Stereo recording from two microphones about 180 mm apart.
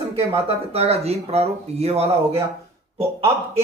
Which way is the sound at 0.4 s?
35° right (ahead or behind).